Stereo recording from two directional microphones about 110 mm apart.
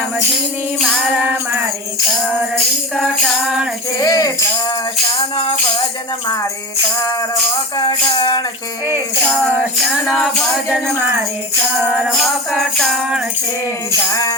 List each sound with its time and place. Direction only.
0.8 s music: 5° right (ahead or behind)
2.9 s music: centre (ahead or behind)
3.9 s speech: 35° left (ahead or behind)
7.8 s music: 45° left (ahead or behind)
9.8 s music: centre (ahead or behind)
11.9 s music: 10° right (ahead or behind)
12.5 s music: centre (ahead or behind)
14.1 s speech: 30° left (ahead or behind)